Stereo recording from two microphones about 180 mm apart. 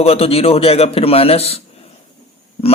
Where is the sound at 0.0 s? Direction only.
35° left (ahead or behind).